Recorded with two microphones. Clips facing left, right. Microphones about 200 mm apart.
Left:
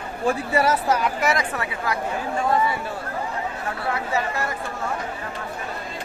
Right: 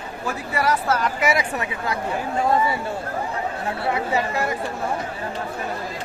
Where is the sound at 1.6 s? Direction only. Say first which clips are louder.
Even; 20° right (ahead or behind).